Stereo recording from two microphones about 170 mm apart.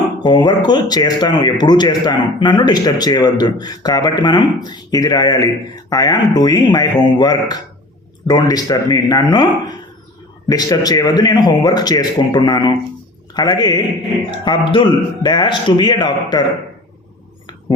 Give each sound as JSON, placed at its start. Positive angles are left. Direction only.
{"t": 0.2, "sound": "speech", "side_deg": 25}